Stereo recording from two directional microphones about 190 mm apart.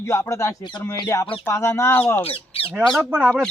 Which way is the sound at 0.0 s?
15° left (ahead or behind).